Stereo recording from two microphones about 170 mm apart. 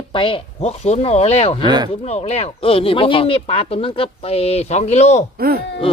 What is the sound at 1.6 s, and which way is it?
Speech, 25° right (ahead or behind).